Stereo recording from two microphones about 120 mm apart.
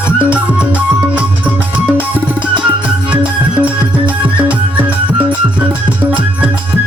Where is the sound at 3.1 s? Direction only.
10° right (ahead or behind).